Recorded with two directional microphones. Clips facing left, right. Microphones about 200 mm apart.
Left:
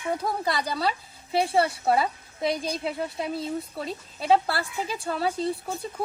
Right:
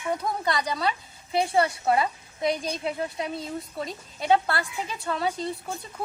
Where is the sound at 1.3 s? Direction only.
Centre (ahead or behind).